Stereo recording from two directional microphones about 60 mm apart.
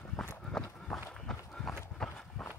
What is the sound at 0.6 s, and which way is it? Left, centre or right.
Walk, centre.